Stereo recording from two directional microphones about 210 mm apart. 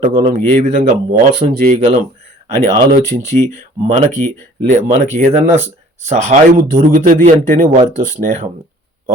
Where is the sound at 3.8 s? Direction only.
35° right (ahead or behind).